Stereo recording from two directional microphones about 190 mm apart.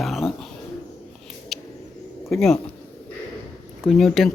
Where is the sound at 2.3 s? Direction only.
Centre (ahead or behind).